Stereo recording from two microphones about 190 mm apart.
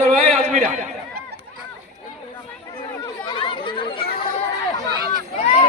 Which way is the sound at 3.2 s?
25° left (ahead or behind).